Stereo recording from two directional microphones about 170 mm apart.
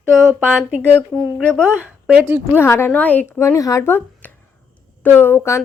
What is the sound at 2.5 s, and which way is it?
Speech, 15° left (ahead or behind).